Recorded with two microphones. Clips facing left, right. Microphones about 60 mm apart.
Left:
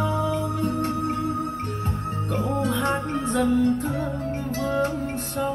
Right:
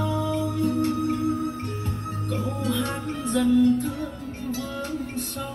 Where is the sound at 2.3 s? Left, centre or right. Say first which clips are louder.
Left 3 dB; left.